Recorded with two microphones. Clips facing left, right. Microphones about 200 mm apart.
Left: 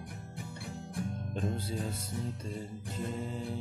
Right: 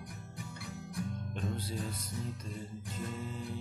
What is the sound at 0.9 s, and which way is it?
Music, 30° left (ahead or behind).